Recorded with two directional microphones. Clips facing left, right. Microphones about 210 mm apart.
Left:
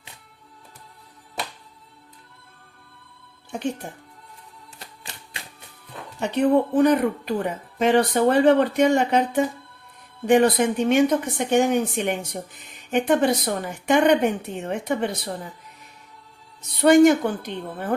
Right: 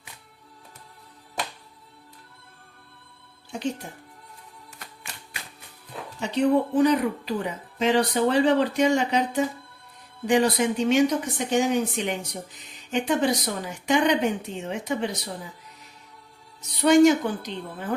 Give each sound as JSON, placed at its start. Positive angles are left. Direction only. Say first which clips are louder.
{"t": 3.5, "sound": "speech", "louder": "left 2 dB", "side_deg": 60}
{"t": 6.1, "sound": "speech", "louder": "left 2 dB", "side_deg": 55}
{"t": 16.6, "sound": "speech", "louder": "left 2 dB", "side_deg": 55}